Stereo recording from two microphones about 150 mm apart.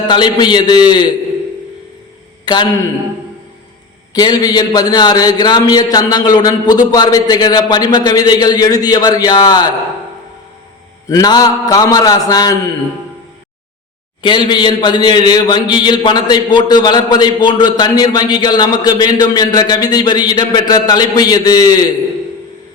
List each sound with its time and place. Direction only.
0.1 s a man's voice: 30° left (ahead or behind)
2.4 s a sound: 30° left (ahead or behind)
4.1 s a man's voice: 25° left (ahead or behind)
11.1 s a man's voice: 25° left (ahead or behind)
14.2 s a man's voice: 30° left (ahead or behind)